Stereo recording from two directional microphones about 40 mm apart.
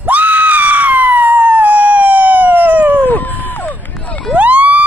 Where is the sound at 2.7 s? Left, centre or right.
Right.